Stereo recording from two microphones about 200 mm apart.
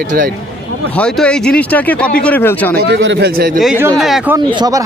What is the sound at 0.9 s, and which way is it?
A man's voice, 5° left (ahead or behind).